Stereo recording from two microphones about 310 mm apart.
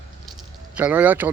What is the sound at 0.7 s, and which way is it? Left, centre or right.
Speech, centre.